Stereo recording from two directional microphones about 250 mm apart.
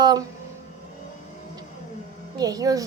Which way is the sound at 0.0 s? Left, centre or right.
Centre.